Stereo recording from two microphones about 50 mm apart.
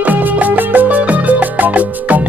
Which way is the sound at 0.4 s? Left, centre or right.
Right.